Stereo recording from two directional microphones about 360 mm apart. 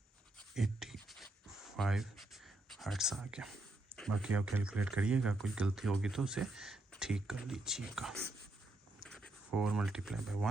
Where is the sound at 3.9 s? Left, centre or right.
Centre.